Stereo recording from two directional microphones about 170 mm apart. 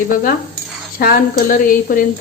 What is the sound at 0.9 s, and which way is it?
Speech, 60° left (ahead or behind).